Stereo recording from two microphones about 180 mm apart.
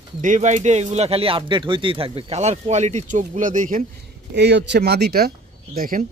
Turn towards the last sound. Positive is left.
turn(degrees=-55)  # may be behind; listen again after turning